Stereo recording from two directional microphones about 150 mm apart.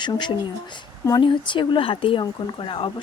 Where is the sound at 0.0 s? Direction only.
30° left (ahead or behind).